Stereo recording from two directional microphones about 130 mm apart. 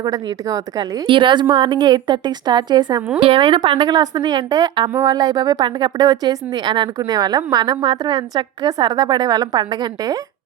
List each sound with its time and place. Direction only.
0.0 s a woman's voice: 25° right (ahead or behind)
1.0 s a woman's voice: 40° right (ahead or behind)